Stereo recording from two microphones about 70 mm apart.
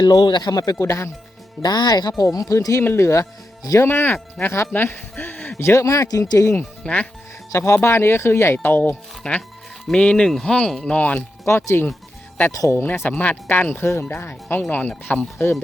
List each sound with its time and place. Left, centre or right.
0.0 s speech: left
0.8 s speech: left
1.6 s speech: left
2.3 s speech: left
2.8 s speech: left
3.8 s speech: left
5.5 s speech: left
6.4 s speech: left
6.8 s speech: centre
7.5 s speech: left; by 10.9 s centre
10.9 s speech: left
11.4 s speech: left
12.8 s speech: left
15.4 s speech: left